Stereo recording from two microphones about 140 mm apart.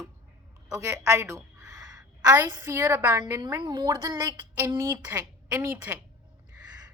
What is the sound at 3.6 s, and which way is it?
A woman's voice, 30° right (ahead or behind).